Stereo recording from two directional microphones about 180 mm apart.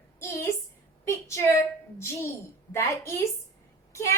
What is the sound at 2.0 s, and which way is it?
A woman's voice, 15° left (ahead or behind).